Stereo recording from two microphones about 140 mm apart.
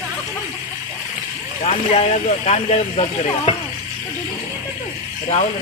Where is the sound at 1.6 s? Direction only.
50° left (ahead or behind).